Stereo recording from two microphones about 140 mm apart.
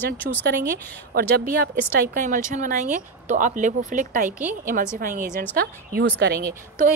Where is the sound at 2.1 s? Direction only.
70° right (ahead or behind).